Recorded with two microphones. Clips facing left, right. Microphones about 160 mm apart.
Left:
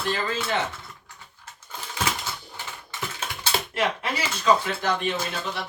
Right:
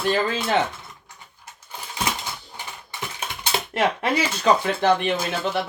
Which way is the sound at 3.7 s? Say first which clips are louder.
Right 7 dB; 60° right (ahead or behind).